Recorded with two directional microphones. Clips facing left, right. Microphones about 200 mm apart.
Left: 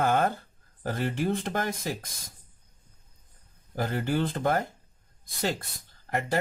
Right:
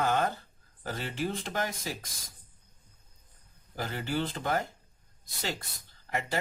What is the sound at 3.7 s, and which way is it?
Speech, 50° left (ahead or behind).